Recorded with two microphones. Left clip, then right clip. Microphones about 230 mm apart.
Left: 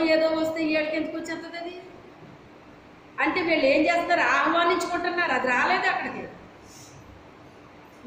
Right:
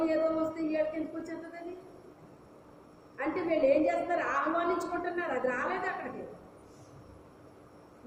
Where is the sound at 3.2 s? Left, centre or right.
Centre.